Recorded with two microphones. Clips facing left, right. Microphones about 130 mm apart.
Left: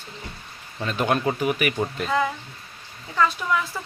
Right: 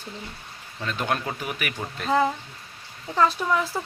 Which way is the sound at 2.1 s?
35° right (ahead or behind).